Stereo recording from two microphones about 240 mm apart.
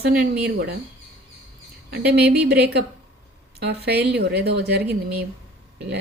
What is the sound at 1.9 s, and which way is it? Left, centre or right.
A woman's voice, right.